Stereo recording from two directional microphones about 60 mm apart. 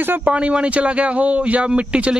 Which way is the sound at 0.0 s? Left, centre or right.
Right.